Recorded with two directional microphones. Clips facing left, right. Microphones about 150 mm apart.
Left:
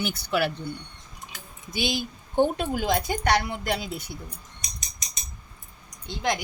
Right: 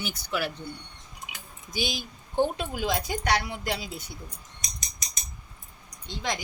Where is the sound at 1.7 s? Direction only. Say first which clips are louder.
Left 4 dB; 60° left (ahead or behind).